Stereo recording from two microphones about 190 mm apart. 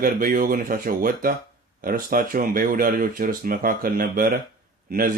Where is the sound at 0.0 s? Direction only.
50° right (ahead or behind).